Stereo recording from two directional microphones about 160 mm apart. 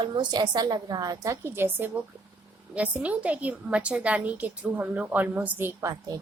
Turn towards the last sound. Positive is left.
turn(degrees=-20)  # may be behind; listen again after turning